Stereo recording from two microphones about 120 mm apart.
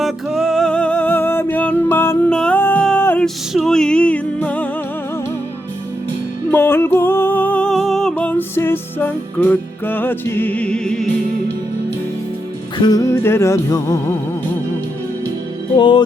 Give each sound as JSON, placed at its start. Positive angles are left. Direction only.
{"t": 0.0, "sound": "music", "side_deg": 0}
{"t": 3.2, "sound": "music", "side_deg": 0}
{"t": 6.5, "sound": "music", "side_deg": 20}
{"t": 8.1, "sound": "music", "side_deg": 15}
{"t": 12.8, "sound": "music", "side_deg": 30}
{"t": 15.8, "sound": "music", "side_deg": 40}